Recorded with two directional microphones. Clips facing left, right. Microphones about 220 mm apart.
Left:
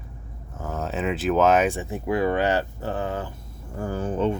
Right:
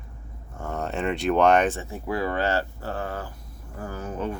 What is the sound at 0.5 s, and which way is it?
Speech, centre (ahead or behind).